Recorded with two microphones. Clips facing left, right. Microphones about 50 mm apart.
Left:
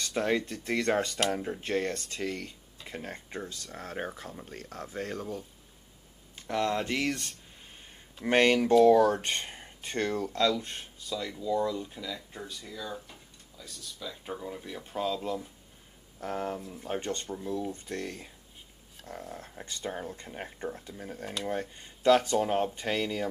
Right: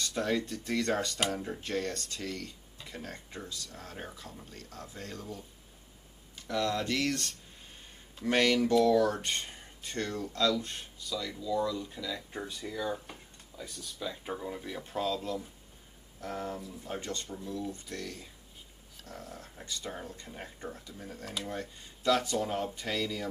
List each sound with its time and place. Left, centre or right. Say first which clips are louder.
0.0 s speech: left 3 dB; left
6.3 s speech: left 2 dB; left
7.0 s speech: left 1 dB; centre
8.2 s speech: left 3 dB; left
10.3 s speech: right 2 dB; left
11.9 s speech: right 1 dB; centre
12.3 s speech: right 3 dB; centre
14.2 s speech: right 1 dB; centre
15.0 s speech: left 3 dB; centre
16.2 s speech: left 4 dB; left